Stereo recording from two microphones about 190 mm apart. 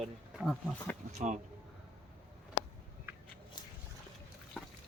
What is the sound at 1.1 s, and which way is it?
Speech, 40° right (ahead or behind).